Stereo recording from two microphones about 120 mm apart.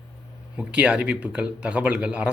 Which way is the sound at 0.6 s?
10° right (ahead or behind).